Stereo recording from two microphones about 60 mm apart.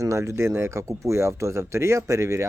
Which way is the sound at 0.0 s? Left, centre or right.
Right.